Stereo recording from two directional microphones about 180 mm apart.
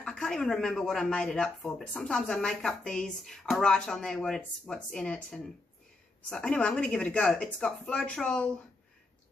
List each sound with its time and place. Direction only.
0.0 s speech: 5° left (ahead or behind)